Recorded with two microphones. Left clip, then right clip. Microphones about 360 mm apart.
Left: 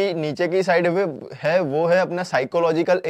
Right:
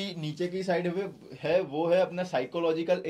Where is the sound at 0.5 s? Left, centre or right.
Left.